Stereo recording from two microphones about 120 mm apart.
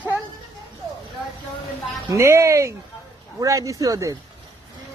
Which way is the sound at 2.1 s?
25° right (ahead or behind).